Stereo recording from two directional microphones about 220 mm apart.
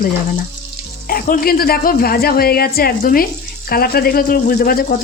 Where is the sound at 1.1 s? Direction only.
40° left (ahead or behind).